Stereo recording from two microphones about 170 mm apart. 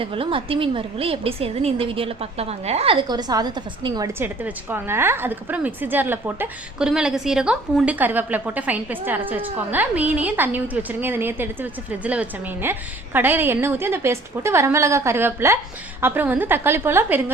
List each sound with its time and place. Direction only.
0.0 s a woman's voice: 30° right (ahead or behind)
4.2 s a woman's voice: 10° right (ahead or behind)